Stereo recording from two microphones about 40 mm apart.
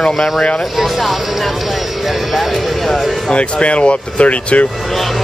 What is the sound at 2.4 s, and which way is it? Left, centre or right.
Music, centre.